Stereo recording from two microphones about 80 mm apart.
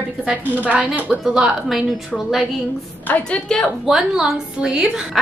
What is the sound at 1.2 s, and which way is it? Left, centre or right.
Speech, centre.